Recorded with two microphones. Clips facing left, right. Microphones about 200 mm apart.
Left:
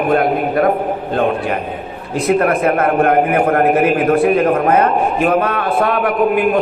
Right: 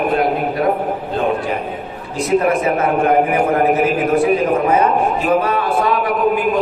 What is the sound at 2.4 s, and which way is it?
A man's voice, 60° left (ahead or behind).